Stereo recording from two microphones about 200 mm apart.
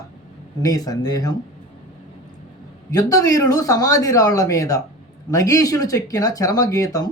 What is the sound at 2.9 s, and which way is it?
Speech, 15° left (ahead or behind).